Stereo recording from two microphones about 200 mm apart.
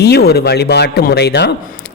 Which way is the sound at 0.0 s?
55° left (ahead or behind).